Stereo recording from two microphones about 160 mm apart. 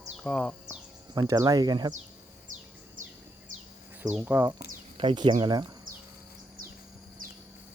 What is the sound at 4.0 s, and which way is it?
Cricket, 10° right (ahead or behind).